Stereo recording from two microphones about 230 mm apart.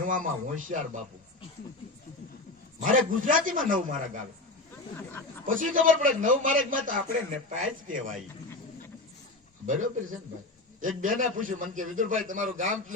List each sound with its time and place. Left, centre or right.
0.0 s a man's voice: right
2.8 s a man's voice: right
5.5 s a man's voice: right
9.6 s a man's voice: right